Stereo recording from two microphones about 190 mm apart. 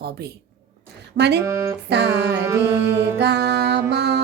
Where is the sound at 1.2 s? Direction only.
55° right (ahead or behind).